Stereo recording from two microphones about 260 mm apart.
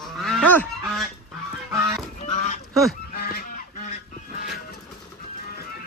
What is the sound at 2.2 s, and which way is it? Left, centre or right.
Honk, left.